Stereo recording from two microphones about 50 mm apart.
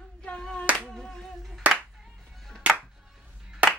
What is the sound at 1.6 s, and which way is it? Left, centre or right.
Music, right.